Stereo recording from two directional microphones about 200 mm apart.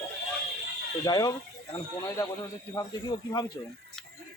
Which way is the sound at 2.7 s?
20° left (ahead or behind).